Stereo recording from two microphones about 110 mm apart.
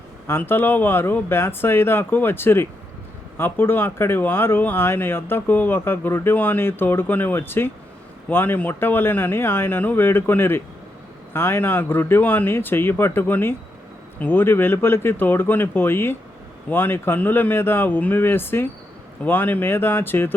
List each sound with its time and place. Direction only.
0.3 s speech: 20° left (ahead or behind)